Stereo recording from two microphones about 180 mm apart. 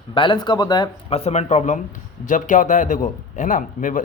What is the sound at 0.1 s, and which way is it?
A man's voice, 25° left (ahead or behind).